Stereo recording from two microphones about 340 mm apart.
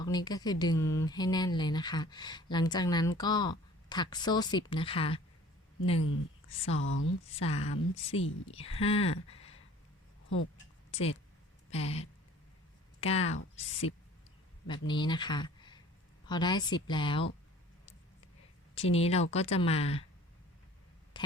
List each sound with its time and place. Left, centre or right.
0.0 s speech: centre
6.7 s speech: left
7.3 s speech: centre
10.9 s speech: centre
18.7 s speech: centre
21.2 s a sound: centre